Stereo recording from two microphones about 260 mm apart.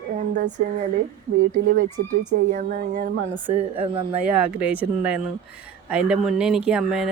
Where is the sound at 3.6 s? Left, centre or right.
Right.